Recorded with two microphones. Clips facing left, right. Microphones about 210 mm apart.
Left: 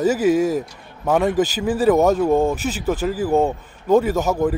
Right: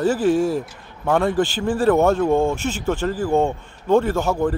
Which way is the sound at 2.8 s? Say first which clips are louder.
Left 2 dB; 5° left (ahead or behind).